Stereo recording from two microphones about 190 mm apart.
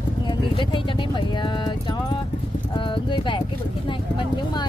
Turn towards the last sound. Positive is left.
turn(degrees=25)  # may be behind; listen again after turning